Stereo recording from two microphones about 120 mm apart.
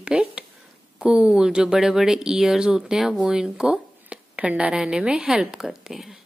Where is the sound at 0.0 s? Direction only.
10° right (ahead or behind).